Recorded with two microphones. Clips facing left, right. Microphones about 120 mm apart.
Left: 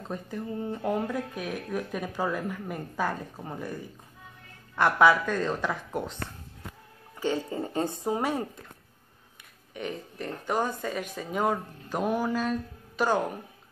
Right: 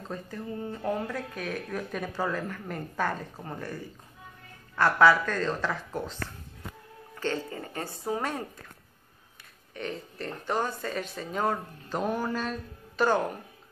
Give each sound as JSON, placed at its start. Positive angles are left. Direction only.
{"t": 0.1, "sound": "speech", "side_deg": 20}
{"t": 4.7, "sound": "a woman's voice", "side_deg": 15}
{"t": 9.8, "sound": "speech", "side_deg": 15}